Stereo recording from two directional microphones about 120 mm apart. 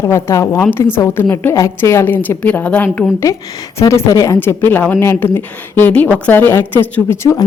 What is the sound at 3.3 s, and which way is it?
A woman's voice, 25° left (ahead or behind).